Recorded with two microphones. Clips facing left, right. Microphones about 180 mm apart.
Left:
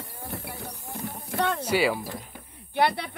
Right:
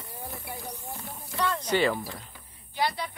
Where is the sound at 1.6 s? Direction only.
10° left (ahead or behind).